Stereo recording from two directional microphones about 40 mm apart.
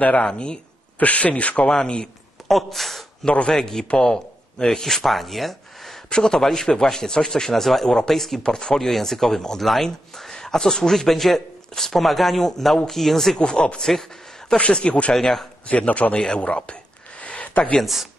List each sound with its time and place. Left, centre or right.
0.2 s a man's voice: left
0.9 s speech: left
1.7 s a man's voice: left
2.4 s speech: centre
3.3 s a man's voice: left
3.5 s a man's voice: centre
6.0 s a man's voice: centre
8.4 s a man's voice: centre
8.7 s a man's voice: centre
12.0 s speech: centre
13.4 s a man's voice: left
15.1 s speech: centre
15.6 s a man's voice: left
17.4 s a sound: left